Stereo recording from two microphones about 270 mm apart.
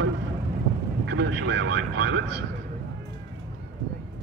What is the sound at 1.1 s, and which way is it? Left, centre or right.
Vehicle, right.